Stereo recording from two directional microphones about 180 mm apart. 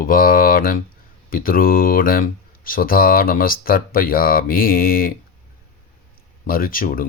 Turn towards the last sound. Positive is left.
turn(degrees=50)  # may be behind; listen again after turning